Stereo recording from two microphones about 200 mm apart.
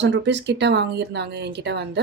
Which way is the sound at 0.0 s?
65° right (ahead or behind).